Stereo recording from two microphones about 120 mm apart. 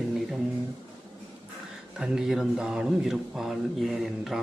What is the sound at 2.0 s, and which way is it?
A man's voice, 5° right (ahead or behind).